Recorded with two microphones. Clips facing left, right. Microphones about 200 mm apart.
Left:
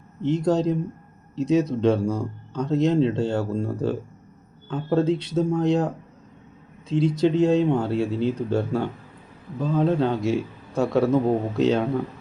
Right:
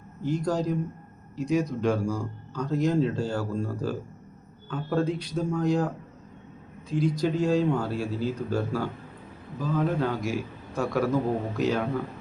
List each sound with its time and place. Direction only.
0.2 s a man's voice: 25° left (ahead or behind)